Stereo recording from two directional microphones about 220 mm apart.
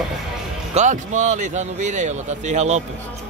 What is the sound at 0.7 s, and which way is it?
Speech, 35° right (ahead or behind).